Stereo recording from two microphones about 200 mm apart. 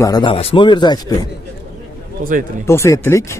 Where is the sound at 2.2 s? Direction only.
45° right (ahead or behind).